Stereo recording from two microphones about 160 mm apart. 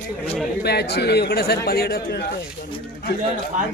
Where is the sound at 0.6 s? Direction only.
90° left.